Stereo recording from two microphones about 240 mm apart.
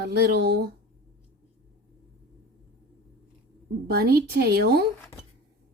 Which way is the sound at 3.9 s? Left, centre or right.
Right.